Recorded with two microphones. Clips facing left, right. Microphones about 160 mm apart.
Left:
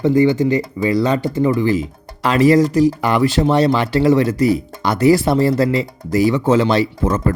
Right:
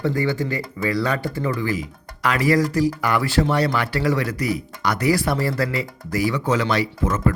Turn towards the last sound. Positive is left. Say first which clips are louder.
# left 4 dB
turn(degrees=30)  # may be behind; listen again after turning